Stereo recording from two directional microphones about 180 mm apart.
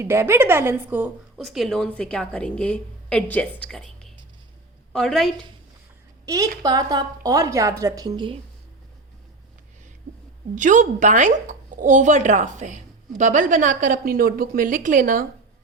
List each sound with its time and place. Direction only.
0.0 s a woman's voice: 15° right (ahead or behind)
1.4 s a woman's voice: centre (ahead or behind)
6.2 s a woman's voice: 20° right (ahead or behind)
10.5 s speech: 45° right (ahead or behind)